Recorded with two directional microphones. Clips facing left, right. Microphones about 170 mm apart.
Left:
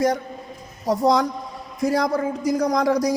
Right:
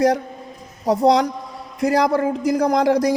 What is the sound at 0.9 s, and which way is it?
A woman's voice, 70° right (ahead or behind).